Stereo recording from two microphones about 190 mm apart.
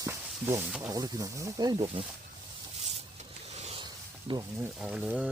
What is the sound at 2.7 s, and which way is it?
Zipper, 35° right (ahead or behind).